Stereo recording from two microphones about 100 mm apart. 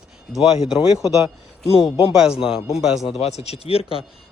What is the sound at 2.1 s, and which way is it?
Speech, 5° right (ahead or behind).